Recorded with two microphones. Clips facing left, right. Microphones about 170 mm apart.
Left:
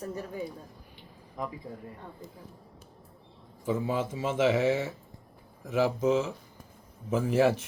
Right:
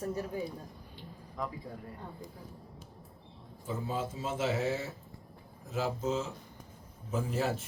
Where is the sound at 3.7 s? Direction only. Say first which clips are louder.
Left 6 dB; 90° left.